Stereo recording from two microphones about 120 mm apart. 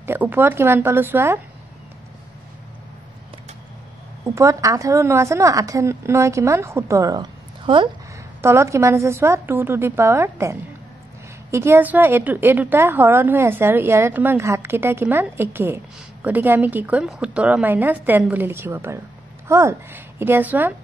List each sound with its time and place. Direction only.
0.0 s a woman's voice: 20° right (ahead or behind)
4.3 s a woman's voice: 25° right (ahead or behind)
7.6 s speech: 45° right (ahead or behind)
8.4 s a woman's voice: 20° right (ahead or behind)